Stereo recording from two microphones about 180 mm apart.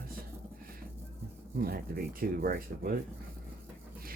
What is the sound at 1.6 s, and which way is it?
Speech, 55° right (ahead or behind).